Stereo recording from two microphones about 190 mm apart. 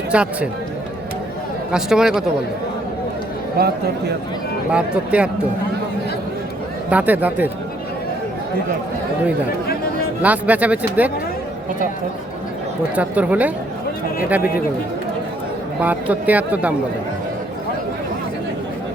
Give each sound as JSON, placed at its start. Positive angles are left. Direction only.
{"t": 0.1, "sound": "speech", "side_deg": -5}
{"t": 1.7, "sound": "speech", "side_deg": -5}
{"t": 3.6, "sound": "speech", "side_deg": -55}
{"t": 4.7, "sound": "speech", "side_deg": -5}
{"t": 6.9, "sound": "speech", "side_deg": -10}
{"t": 10.2, "sound": "speech", "side_deg": -10}
{"t": 13.0, "sound": "speech", "side_deg": -5}
{"t": 15.8, "sound": "speech", "side_deg": -10}